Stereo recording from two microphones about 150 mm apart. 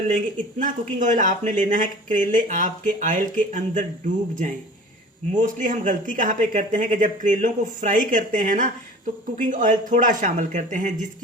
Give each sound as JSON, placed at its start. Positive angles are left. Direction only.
{"t": 0.6, "sound": "speech", "side_deg": -55}